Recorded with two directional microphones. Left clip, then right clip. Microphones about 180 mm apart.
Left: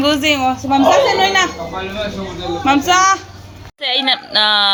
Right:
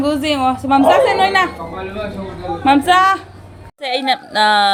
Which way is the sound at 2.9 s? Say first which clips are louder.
Even; 20° right (ahead or behind).